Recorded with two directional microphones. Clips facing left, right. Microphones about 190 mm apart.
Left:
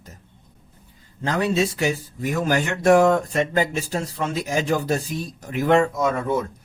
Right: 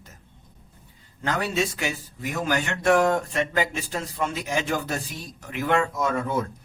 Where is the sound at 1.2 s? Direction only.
30° left (ahead or behind).